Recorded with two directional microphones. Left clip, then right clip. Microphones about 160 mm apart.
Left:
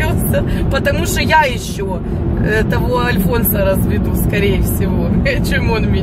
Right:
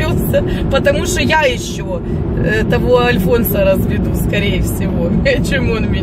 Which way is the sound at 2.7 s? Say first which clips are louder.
Right 5 dB; 15° right (ahead or behind).